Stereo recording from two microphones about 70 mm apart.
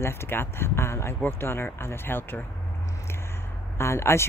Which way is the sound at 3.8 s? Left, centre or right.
Left.